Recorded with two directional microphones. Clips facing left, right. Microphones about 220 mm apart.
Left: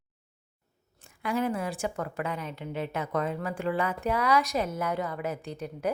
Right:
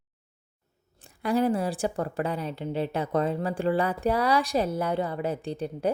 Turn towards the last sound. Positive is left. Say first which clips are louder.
# right 4 dB
turn(degrees=-30)  # may be behind; listen again after turning